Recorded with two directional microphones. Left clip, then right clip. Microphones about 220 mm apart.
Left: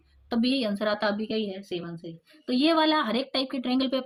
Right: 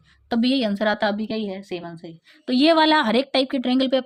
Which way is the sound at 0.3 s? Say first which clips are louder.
Right 5 dB; 35° right (ahead or behind).